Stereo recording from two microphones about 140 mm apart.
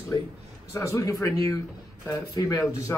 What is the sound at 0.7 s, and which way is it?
Speech, 20° left (ahead or behind).